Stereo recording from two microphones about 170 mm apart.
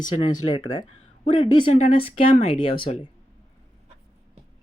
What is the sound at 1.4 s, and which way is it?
Speech, 30° left (ahead or behind).